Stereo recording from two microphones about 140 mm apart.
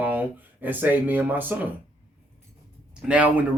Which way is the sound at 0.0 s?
10° right (ahead or behind).